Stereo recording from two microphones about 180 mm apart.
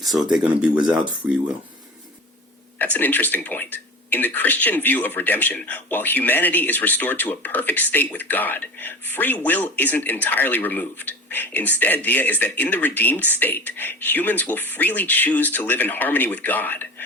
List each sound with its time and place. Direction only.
0.0 s speech: centre (ahead or behind)
2.7 s speech: 10° left (ahead or behind)